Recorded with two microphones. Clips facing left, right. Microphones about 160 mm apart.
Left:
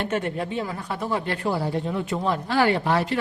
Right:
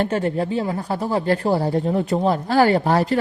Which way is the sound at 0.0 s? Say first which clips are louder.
Right 5 dB; 35° right (ahead or behind).